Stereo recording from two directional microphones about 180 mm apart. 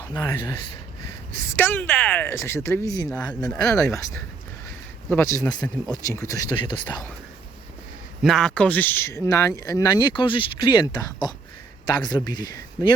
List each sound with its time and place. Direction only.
0.1 s speech: 15° left (ahead or behind)
3.5 s speech: 5° left (ahead or behind)
5.0 s speech: 15° left (ahead or behind)
8.2 s speech: centre (ahead or behind); by 12.9 s 25° left (ahead or behind)